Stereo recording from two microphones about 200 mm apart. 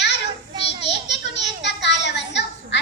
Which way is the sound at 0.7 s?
60° left (ahead or behind).